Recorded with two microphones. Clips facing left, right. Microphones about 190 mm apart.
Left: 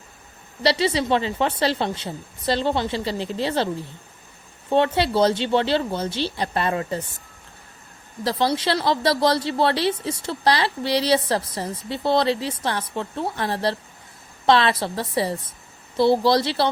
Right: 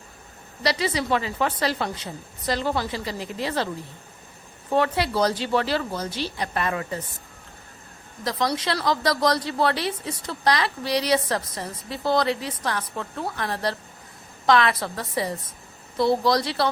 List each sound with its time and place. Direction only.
0.6 s speech: 30° left (ahead or behind)
4.7 s speech: 25° left (ahead or behind)
8.2 s speech: 30° left (ahead or behind)